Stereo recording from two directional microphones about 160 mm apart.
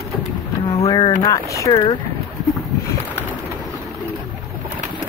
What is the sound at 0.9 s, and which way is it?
Speech, 25° left (ahead or behind).